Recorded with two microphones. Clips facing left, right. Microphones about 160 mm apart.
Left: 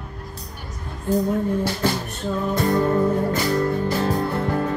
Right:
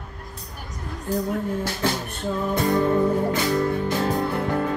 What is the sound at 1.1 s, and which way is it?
Music, 20° left (ahead or behind).